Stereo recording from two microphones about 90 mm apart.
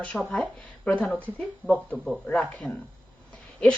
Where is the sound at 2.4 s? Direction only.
15° left (ahead or behind).